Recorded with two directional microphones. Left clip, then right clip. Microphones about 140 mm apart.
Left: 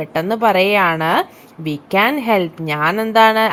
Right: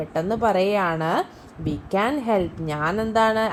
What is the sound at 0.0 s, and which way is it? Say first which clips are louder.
A woman's voice: left 6 dB; 30° left (ahead or behind).